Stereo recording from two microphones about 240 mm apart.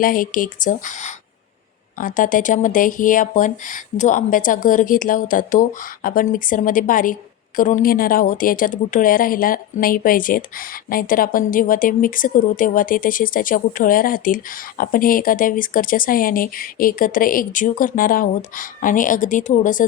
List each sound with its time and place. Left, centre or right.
0.0 s a woman's voice: left